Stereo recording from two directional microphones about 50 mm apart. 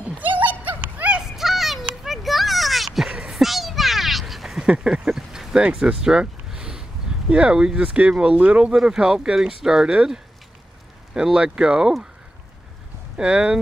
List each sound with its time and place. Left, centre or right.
0.2 s horse: right
1.2 s children playing: centre
4.6 s a sound: centre
5.0 s a sound: centre
5.6 s speech: centre
7.8 s speech: right
8.7 s speech: centre
11.3 s speech: centre
13.2 s speech: centre